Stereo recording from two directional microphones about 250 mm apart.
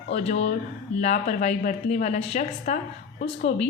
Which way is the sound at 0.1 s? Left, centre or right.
Left.